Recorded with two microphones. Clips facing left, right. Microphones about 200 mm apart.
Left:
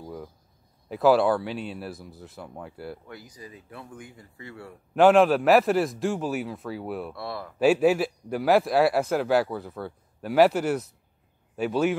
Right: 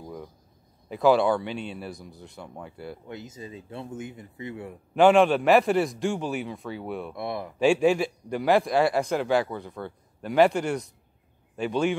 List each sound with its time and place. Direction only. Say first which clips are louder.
0.0 s a sound: left 1 dB; centre (ahead or behind)
0.8 s speech: left 1 dB; centre (ahead or behind)
3.1 s speech: right 4 dB; 25° right (ahead or behind)
4.9 s speech: left 1 dB; centre (ahead or behind)
7.2 s speech: right 3 dB; 20° right (ahead or behind)
7.5 s speech: left 1 dB; 5° left (ahead or behind)